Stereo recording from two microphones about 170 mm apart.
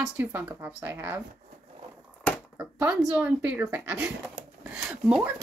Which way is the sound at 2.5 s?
5° right (ahead or behind).